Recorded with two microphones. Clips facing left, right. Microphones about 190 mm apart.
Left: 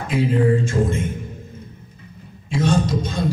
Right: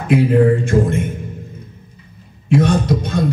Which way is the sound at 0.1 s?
60° right (ahead or behind).